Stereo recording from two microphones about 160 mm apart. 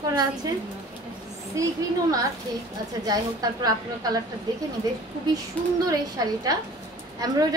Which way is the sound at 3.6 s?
25° right (ahead or behind).